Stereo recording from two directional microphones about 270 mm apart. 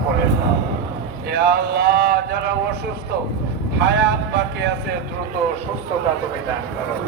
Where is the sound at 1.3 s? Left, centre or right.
Right.